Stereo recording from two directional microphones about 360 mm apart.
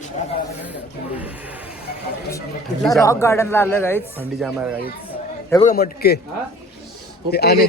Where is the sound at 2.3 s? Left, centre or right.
Centre.